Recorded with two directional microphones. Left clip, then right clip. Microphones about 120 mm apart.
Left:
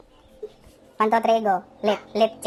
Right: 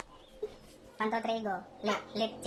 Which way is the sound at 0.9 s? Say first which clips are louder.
Left 14 dB; 55° left (ahead or behind).